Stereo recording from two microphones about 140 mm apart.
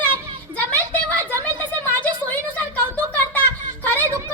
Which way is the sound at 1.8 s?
10° left (ahead or behind).